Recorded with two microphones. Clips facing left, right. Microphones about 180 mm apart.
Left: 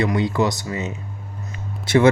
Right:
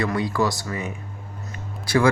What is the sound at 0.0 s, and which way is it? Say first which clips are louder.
Speech: left 3 dB; 25° left (ahead or behind).